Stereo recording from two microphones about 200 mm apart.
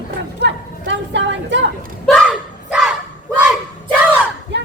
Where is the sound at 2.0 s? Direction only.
5° left (ahead or behind).